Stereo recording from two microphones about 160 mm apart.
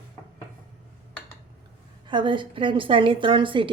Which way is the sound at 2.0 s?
30° right (ahead or behind).